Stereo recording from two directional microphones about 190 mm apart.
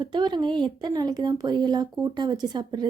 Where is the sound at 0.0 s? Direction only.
25° right (ahead or behind).